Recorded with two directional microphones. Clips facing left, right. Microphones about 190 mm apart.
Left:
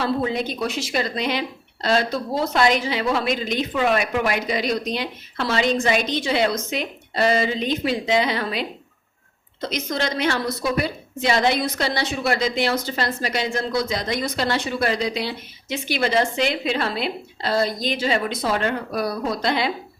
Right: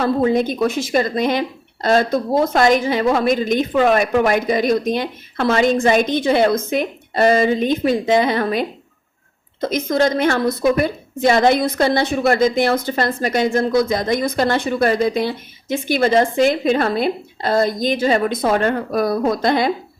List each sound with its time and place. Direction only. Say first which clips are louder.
0.0 s a woman's voice: right 6 dB; 45° right (ahead or behind)